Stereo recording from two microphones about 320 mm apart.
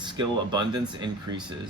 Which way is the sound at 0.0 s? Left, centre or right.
Centre.